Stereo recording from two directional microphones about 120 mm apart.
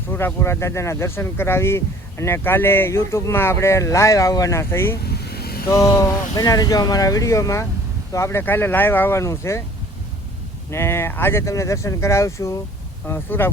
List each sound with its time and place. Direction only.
0.1 s speech: 15° left (ahead or behind)
10.7 s speech: 20° left (ahead or behind)